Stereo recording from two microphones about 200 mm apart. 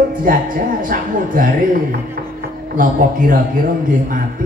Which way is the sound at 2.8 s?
45° right (ahead or behind).